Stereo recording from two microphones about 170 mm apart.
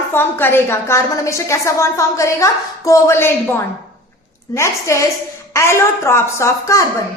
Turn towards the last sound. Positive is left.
turn(degrees=15)  # may be behind; listen again after turning